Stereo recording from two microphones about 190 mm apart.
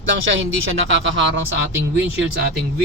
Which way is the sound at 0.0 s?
85° right.